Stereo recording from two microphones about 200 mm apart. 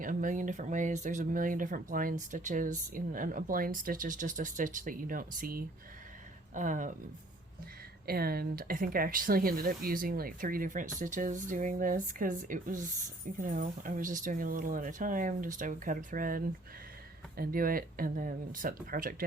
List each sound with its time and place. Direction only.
0.0 s speech: 40° right (ahead or behind)
8.0 s speech: 50° right (ahead or behind)